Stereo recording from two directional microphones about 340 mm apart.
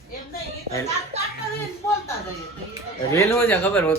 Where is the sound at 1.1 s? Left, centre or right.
Centre.